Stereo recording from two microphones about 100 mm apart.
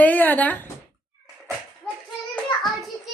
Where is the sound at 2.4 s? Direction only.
5° left (ahead or behind).